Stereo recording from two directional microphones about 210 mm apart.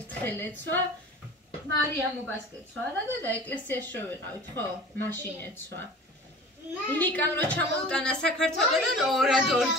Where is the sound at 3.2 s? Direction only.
10° left (ahead or behind).